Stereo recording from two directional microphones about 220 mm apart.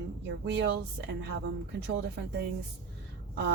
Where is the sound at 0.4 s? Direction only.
50° right (ahead or behind).